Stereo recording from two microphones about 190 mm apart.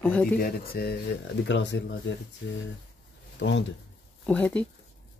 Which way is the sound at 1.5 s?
70° left (ahead or behind).